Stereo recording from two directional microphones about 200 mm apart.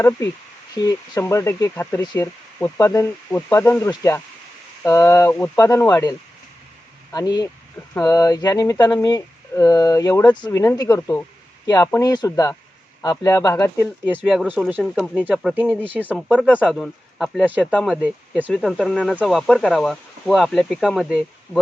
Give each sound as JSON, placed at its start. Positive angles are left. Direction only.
{"t": 0.7, "sound": "speech", "side_deg": 20}
{"t": 14.3, "sound": "speech", "side_deg": -10}
{"t": 17.7, "sound": "speech", "side_deg": 5}
{"t": 18.0, "sound": "speech", "side_deg": -5}